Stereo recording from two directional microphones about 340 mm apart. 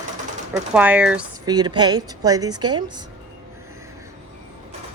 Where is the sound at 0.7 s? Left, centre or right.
Centre.